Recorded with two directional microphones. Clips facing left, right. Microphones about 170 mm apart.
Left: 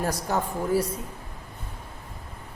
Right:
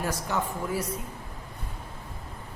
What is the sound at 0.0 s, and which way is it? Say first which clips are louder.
Speech: left 3 dB; 40° left (ahead or behind).